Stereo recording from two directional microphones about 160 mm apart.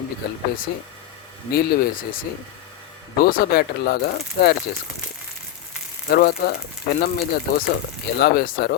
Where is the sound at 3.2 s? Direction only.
65° left (ahead or behind); by 4.5 s 80° left.